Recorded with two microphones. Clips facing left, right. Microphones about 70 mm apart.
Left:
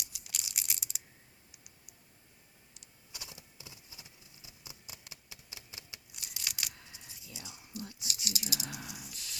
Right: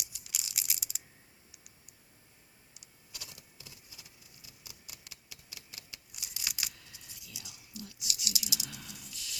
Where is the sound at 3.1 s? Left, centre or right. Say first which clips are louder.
Left 1 dB; left.